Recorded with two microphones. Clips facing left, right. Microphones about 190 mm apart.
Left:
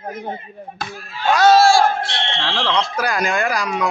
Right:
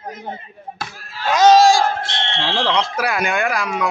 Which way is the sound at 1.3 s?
15° right (ahead or behind).